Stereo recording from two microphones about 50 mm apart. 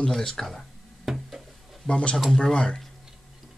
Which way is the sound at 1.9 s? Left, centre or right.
Left.